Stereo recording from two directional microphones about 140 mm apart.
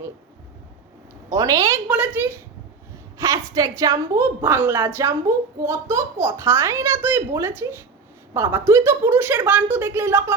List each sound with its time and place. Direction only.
1.3 s a child's voice: 25° right (ahead or behind)
1.9 s a woman's voice: 10° right (ahead or behind)